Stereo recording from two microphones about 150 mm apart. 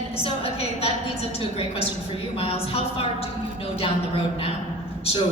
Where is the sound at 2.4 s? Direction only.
40° left (ahead or behind).